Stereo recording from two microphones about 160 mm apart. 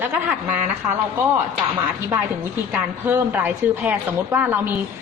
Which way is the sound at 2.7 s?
10° right (ahead or behind).